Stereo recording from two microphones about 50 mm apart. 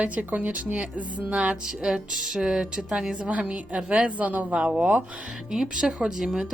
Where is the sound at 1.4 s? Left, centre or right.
Centre.